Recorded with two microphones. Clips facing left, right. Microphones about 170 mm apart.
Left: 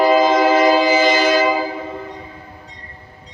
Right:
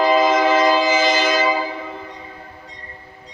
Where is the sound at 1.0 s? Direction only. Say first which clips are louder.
Left 3 dB; 15° left (ahead or behind).